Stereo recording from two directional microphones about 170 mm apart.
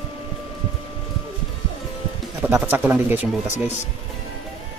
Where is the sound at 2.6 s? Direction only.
10° right (ahead or behind).